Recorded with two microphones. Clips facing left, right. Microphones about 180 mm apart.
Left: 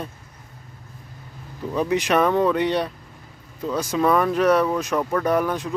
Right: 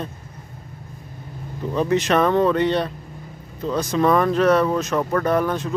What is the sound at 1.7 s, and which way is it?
Speech, 10° left (ahead or behind).